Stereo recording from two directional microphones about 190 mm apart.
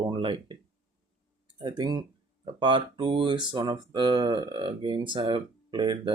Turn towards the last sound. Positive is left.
turn(degrees=-25)  # may be behind; listen again after turning